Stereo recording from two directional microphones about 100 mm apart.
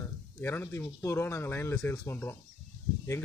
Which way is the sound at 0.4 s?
20° left (ahead or behind).